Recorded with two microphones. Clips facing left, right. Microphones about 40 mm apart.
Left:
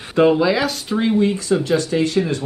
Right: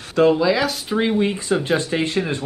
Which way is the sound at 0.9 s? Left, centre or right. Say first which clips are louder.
Left 2 dB; centre.